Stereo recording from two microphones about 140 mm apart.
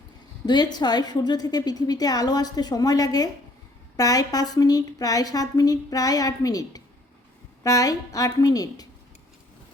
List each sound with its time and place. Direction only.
0.4 s a woman's voice: 30° left (ahead or behind)